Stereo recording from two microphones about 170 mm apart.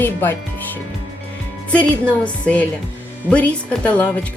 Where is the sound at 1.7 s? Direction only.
5° left (ahead or behind).